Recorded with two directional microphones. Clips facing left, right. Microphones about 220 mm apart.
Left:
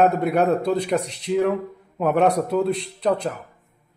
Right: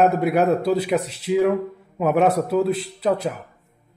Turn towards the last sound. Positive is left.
turn(degrees=-5)  # may be behind; listen again after turning